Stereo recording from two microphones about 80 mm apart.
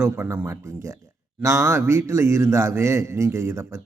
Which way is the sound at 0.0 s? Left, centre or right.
Right.